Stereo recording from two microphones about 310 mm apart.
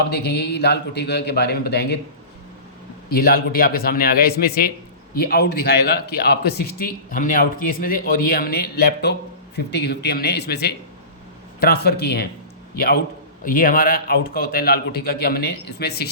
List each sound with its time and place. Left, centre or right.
0.1 s a man's voice: left
3.1 s a man's voice: left